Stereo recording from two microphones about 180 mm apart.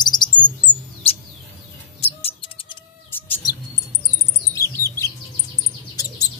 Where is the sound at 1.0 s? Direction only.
30° left (ahead or behind).